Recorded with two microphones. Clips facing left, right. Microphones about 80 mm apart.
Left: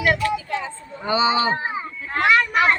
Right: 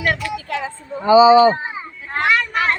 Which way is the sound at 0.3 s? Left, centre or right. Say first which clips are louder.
Right 2 dB; right.